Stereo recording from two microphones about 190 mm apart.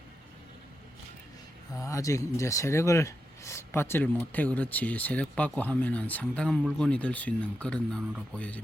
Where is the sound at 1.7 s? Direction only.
15° left (ahead or behind).